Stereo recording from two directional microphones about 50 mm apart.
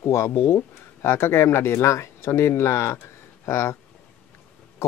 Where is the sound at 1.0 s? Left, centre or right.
Left.